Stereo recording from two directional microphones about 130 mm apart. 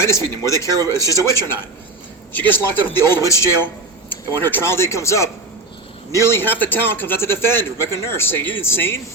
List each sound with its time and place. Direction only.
0.0 s a man's voice: 20° left (ahead or behind)